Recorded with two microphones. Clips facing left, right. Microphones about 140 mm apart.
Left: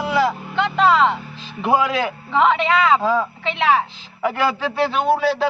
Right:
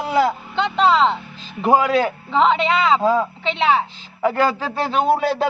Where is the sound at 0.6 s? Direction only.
25° right (ahead or behind).